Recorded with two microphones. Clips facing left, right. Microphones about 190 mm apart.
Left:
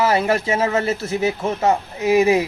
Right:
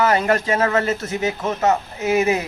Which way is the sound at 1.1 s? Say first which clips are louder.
Left 2 dB; 30° left (ahead or behind).